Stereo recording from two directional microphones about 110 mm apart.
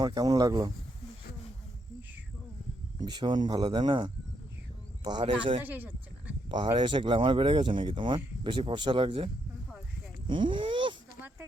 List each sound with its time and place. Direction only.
0.1 s speech: 35° right (ahead or behind)
3.0 s speech: 40° right (ahead or behind)
5.6 s speech: 15° right (ahead or behind)
6.5 s speech: 45° right (ahead or behind)